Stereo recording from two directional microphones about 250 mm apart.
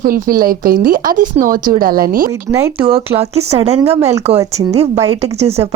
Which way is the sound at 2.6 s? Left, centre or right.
Right.